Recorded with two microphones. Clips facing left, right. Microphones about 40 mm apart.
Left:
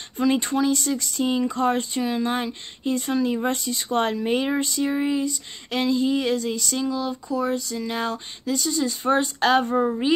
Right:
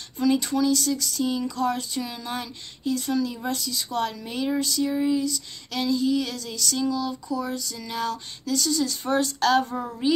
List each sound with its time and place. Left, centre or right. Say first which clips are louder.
0.2 s speech: left 1 dB; left